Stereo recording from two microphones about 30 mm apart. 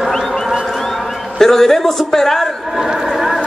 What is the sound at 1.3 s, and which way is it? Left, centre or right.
Speech, centre.